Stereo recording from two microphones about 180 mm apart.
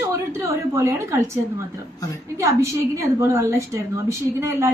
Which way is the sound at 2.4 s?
15° right (ahead or behind).